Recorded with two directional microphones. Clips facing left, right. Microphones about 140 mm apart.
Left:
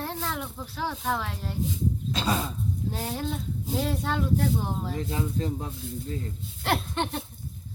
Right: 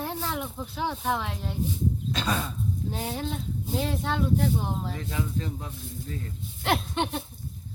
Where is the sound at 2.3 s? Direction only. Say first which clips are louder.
Left 2 dB; 15° left (ahead or behind).